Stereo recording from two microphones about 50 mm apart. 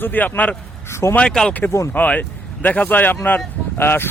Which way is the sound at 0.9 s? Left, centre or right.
Left.